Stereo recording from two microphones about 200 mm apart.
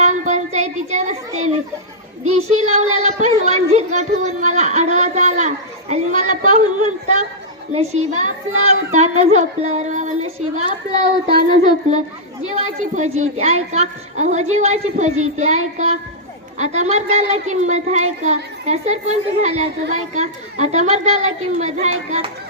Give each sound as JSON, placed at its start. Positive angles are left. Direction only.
{"t": 0.0, "sound": "a sound", "side_deg": -35}
{"t": 2.2, "sound": "speech", "side_deg": -90}
{"t": 2.6, "sound": "a woman's voice", "side_deg": -35}
{"t": 9.3, "sound": "a woman's voice", "side_deg": -35}